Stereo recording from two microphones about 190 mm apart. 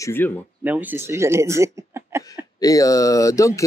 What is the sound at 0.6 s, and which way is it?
Speech, 10° right (ahead or behind).